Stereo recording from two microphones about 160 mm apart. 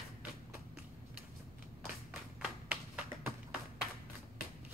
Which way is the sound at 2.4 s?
5° right (ahead or behind).